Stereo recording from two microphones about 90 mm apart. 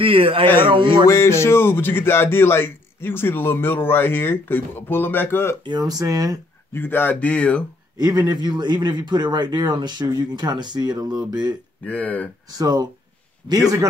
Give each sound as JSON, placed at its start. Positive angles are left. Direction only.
{"t": 0.0, "sound": "a man's voice", "side_deg": -80}
{"t": 0.7, "sound": "speech", "side_deg": -70}
{"t": 1.0, "sound": "speech", "side_deg": 30}
{"t": 5.6, "sound": "a man's voice", "side_deg": -50}
{"t": 6.7, "sound": "speech", "side_deg": 25}
{"t": 8.0, "sound": "a man's voice", "side_deg": -50}
{"t": 11.8, "sound": "speech", "side_deg": 20}
{"t": 12.5, "sound": "a man's voice", "side_deg": -50}